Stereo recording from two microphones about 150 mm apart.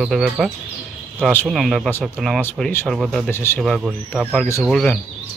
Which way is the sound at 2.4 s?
15° left (ahead or behind).